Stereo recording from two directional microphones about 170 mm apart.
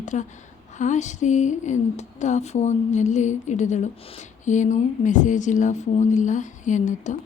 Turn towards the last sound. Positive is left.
turn(degrees=45)  # may be behind; listen again after turning